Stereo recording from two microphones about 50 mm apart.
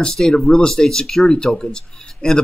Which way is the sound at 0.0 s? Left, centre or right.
Centre.